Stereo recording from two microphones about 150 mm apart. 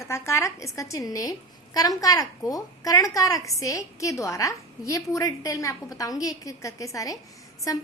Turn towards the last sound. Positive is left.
turn(degrees=25)  # may be behind; listen again after turning